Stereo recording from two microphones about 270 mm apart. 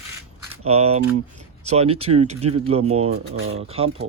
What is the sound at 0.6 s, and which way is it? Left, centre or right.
Speech, right.